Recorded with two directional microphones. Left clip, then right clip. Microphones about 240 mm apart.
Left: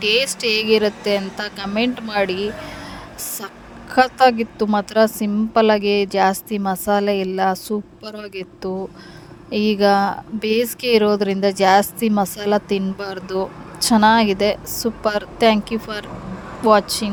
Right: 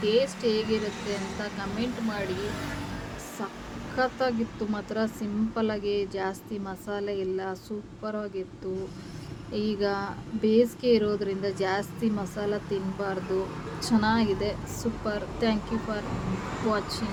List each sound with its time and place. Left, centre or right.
0.0 s speech: left
3.9 s speech: left